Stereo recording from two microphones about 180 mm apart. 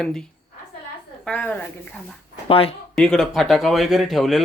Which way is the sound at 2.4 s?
30° left (ahead or behind).